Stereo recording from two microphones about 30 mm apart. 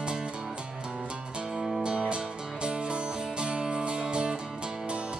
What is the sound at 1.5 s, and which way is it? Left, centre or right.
Music, centre.